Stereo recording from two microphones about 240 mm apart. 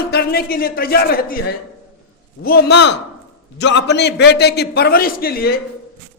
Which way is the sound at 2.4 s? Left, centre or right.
Left.